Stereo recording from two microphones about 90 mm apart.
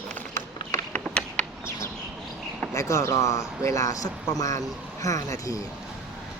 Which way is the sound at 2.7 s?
35° left (ahead or behind).